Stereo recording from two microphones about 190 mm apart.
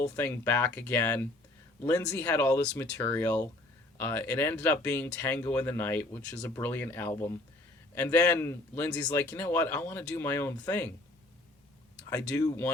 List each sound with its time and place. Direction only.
0.0 s speech: 10° left (ahead or behind)
12.3 s speech: 15° left (ahead or behind)